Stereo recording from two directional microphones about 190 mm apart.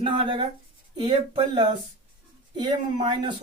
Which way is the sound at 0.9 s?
25° right (ahead or behind).